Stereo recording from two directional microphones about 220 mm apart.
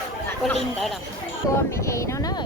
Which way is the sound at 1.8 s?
15° left (ahead or behind).